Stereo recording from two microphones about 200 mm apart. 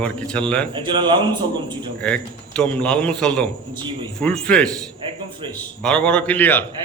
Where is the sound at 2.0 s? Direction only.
5° left (ahead or behind).